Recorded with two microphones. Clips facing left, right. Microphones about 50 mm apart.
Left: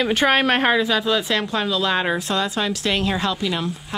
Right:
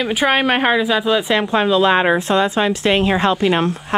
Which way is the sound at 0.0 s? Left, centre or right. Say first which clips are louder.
Right 1 dB; centre.